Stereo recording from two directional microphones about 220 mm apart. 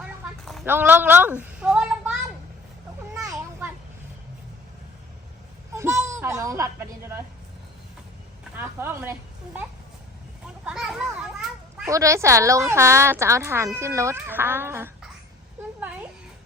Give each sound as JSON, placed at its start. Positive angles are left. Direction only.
{"t": 0.0, "sound": "a sound", "side_deg": 0}
{"t": 3.2, "sound": "children playing", "side_deg": -15}
{"t": 5.7, "sound": "a sound", "side_deg": -10}
{"t": 8.5, "sound": "speech", "side_deg": -10}
{"t": 10.4, "sound": "children playing", "side_deg": -5}
{"t": 11.9, "sound": "a woman's voice", "side_deg": -15}